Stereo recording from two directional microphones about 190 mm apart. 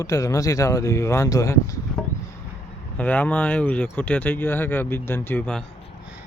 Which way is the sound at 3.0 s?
10° left (ahead or behind).